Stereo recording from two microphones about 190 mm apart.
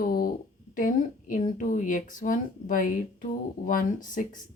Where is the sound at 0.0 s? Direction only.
50° left (ahead or behind).